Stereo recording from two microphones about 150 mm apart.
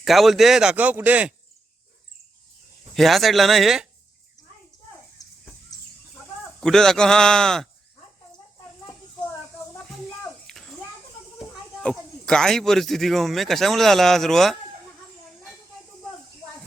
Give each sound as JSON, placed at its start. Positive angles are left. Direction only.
{"t": 0.0, "sound": "speech", "side_deg": 0}
{"t": 2.9, "sound": "speech", "side_deg": 0}
{"t": 5.2, "sound": "a sound", "side_deg": 25}
{"t": 6.6, "sound": "speech", "side_deg": 5}
{"t": 9.7, "sound": "a sound", "side_deg": 0}
{"t": 11.3, "sound": "speech", "side_deg": 5}